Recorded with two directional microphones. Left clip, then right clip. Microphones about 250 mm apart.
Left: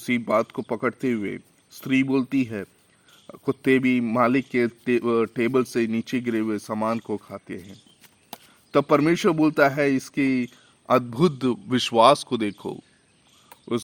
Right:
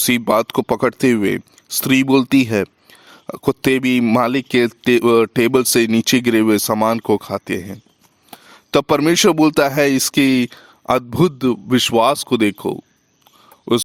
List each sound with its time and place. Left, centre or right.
0.0 s speech: right